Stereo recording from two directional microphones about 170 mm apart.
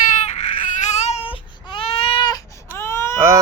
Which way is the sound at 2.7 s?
15° left (ahead or behind).